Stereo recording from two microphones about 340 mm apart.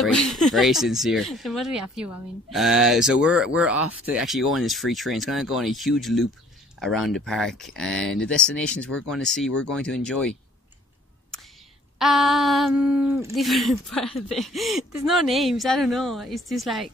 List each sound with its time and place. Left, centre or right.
0.0 s speech: centre
12.0 s speech: centre